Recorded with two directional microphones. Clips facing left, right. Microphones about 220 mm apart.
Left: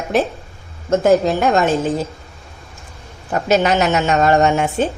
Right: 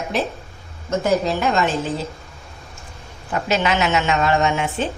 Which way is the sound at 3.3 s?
40° left (ahead or behind).